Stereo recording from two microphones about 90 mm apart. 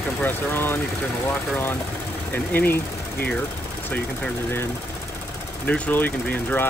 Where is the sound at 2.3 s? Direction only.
20° left (ahead or behind).